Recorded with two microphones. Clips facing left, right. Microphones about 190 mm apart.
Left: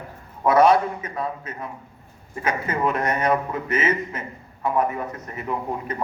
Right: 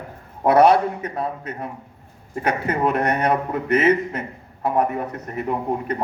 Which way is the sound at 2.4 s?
65° right (ahead or behind).